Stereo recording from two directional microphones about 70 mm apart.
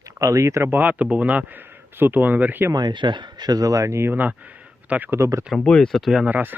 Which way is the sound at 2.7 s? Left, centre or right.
Right.